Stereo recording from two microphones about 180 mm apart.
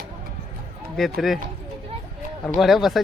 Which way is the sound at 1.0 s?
Centre (ahead or behind).